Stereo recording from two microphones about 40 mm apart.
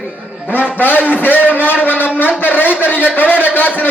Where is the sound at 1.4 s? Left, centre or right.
Left.